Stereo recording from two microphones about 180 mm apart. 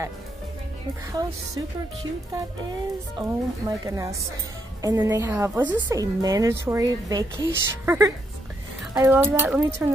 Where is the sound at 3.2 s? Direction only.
25° right (ahead or behind).